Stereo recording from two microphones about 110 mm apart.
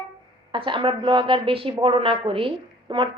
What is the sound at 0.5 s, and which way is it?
A woman's voice, 50° right (ahead or behind).